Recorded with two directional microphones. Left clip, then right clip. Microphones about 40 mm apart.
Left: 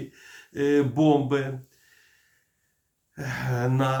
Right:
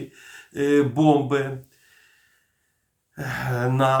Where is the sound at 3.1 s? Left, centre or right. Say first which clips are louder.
Right 3 dB; right.